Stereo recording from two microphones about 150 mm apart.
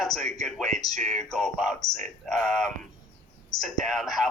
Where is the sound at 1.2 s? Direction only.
5° left (ahead or behind).